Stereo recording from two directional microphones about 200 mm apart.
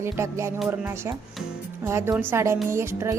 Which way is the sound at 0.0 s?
15° right (ahead or behind).